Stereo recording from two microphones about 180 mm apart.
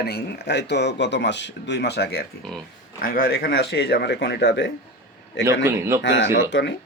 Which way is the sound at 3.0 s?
55° left (ahead or behind).